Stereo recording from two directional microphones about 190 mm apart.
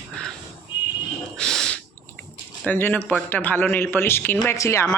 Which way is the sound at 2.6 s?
10° left (ahead or behind).